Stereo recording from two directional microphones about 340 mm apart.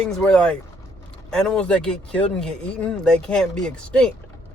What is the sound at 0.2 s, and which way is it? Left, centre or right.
Speech, centre.